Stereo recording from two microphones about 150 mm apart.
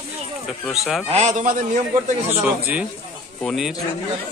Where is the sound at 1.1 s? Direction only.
50° right (ahead or behind).